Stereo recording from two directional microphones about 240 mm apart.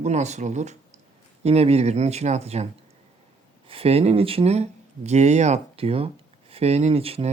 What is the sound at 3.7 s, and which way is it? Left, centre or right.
Speech, right.